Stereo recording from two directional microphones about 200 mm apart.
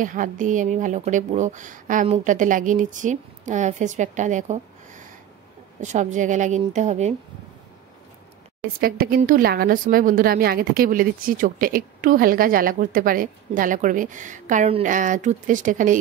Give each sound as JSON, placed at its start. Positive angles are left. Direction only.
{"t": 0.0, "sound": "speech", "side_deg": -40}
{"t": 8.8, "sound": "a woman's voice", "side_deg": -50}